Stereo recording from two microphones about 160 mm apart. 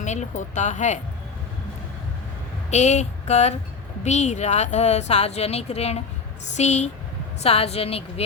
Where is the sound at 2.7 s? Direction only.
45° left (ahead or behind).